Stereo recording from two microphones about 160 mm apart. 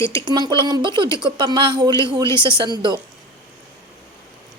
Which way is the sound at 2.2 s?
15° left (ahead or behind).